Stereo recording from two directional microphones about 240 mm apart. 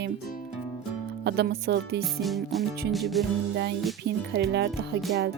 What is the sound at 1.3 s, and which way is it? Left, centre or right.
Speech, right.